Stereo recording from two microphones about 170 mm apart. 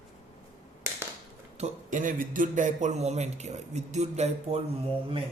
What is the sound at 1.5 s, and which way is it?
Speech, 45° right (ahead or behind).